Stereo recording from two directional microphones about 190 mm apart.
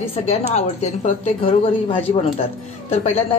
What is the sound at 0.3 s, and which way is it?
A woman's voice, 35° left (ahead or behind).